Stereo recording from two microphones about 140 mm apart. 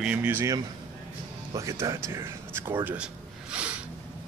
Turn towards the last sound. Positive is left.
turn(degrees=-10)  # may be behind; listen again after turning